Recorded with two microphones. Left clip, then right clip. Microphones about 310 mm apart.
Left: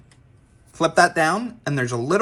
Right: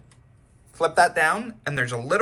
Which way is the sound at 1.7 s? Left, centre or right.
Centre.